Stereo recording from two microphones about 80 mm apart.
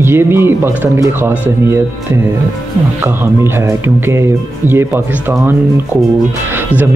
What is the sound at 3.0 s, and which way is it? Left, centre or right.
Speech, right.